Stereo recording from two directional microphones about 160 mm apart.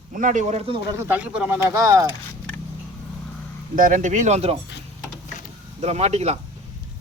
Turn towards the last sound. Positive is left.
turn(degrees=-40)  # may be behind; listen again after turning